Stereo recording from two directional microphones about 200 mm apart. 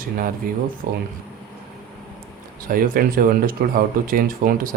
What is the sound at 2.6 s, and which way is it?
Speech, 45° right (ahead or behind).